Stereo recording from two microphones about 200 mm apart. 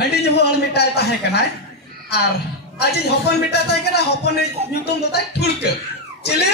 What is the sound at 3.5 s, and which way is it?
Speech, 55° left (ahead or behind).